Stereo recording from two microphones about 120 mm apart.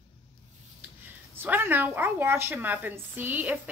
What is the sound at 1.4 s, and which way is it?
A woman's voice, 15° right (ahead or behind).